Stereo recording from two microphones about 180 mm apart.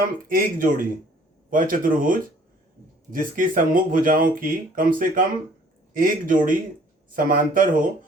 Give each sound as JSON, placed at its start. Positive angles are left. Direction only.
{"t": 0.0, "sound": "speech", "side_deg": -50}